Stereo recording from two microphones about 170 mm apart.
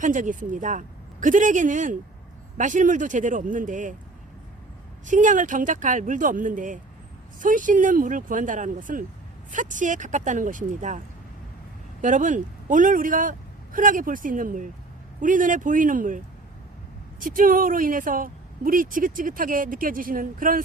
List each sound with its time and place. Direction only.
0.0 s speech: 50° right (ahead or behind)
5.0 s speech: 50° right (ahead or behind)
12.0 s speech: 45° right (ahead or behind)